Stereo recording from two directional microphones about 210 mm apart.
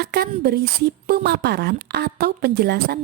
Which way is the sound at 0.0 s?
50° right (ahead or behind).